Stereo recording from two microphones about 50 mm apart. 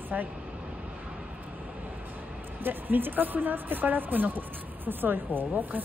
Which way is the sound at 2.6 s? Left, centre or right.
Right.